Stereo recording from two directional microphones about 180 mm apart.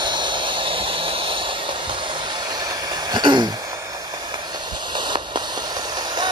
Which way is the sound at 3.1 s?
25° right (ahead or behind).